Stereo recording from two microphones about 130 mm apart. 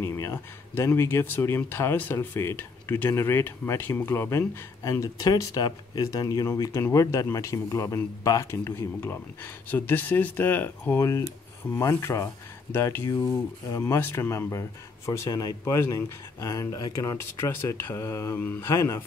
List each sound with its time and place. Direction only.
0.0 s speech: 25° left (ahead or behind)